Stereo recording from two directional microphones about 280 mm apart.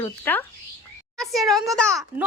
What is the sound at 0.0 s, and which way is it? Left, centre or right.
Speech, centre.